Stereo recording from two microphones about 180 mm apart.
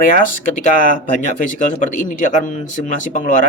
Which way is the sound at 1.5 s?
45° left (ahead or behind).